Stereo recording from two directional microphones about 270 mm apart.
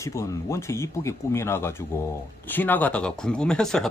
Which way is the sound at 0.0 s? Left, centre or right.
Centre.